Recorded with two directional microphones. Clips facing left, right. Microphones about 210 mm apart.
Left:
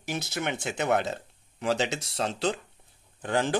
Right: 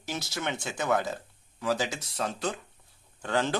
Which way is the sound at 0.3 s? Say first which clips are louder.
Left 2 dB; 20° left (ahead or behind).